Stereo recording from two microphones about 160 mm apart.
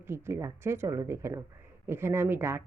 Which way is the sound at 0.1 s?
15° right (ahead or behind).